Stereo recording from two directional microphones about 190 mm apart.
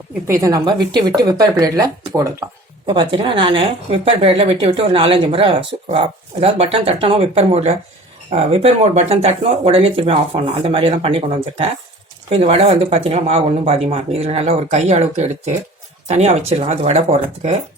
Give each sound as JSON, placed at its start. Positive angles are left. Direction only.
{"t": 0.3, "sound": "a woman's voice", "side_deg": -15}